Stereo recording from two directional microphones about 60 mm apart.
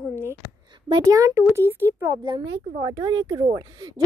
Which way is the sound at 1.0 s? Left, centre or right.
Right.